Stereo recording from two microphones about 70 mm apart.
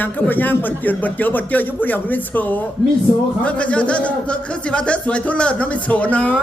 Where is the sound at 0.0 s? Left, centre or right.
Left.